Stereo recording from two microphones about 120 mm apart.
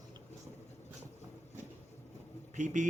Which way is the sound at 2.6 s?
90° right.